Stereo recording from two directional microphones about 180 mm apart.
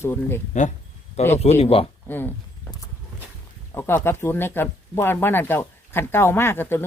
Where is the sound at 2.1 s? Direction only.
10° left (ahead or behind).